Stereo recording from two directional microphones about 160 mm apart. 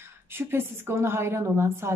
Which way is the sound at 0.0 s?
15° right (ahead or behind).